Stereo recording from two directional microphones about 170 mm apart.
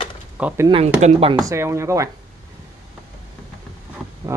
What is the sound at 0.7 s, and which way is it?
Speech, 35° right (ahead or behind).